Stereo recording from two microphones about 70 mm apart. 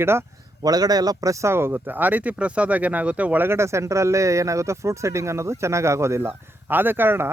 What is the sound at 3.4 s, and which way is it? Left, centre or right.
Speech, right.